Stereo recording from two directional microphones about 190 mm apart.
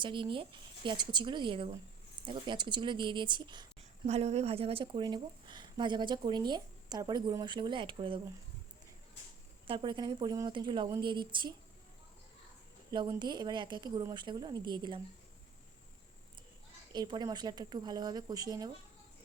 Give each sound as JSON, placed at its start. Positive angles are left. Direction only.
{"t": 0.0, "sound": "a woman's voice", "side_deg": -25}
{"t": 4.0, "sound": "a woman's voice", "side_deg": -35}
{"t": 9.6, "sound": "a woman's voice", "side_deg": -25}
{"t": 12.9, "sound": "a woman's voice", "side_deg": -20}
{"t": 16.9, "sound": "a woman's voice", "side_deg": -20}